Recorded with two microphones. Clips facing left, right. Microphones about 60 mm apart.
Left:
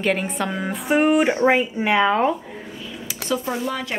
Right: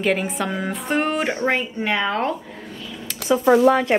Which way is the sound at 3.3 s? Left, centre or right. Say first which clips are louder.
Right 5 dB; right.